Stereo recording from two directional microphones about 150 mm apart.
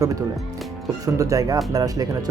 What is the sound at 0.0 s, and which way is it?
Speech, 25° right (ahead or behind).